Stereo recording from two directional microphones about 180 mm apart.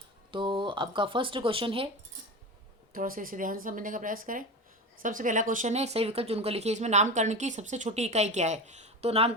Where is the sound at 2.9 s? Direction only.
50° right (ahead or behind).